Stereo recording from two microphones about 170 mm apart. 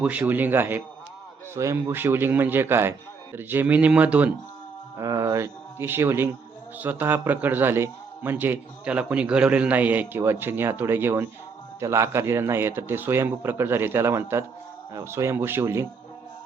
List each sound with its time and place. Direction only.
0.0 s a man's voice: 10° right (ahead or behind)